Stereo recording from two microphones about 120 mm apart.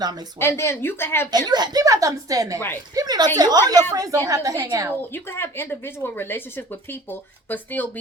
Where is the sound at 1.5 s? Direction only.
35° right (ahead or behind).